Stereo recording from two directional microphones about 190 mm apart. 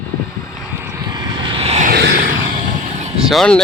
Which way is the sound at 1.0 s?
20° right (ahead or behind).